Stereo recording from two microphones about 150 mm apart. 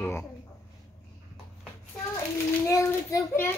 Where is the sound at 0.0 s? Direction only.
20° left (ahead or behind).